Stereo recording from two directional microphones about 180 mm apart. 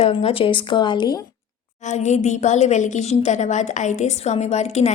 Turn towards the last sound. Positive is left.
turn(degrees=40)  # may be behind; listen again after turning